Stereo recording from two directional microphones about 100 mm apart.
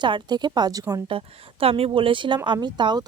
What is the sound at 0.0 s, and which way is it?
Speech, 50° right (ahead or behind).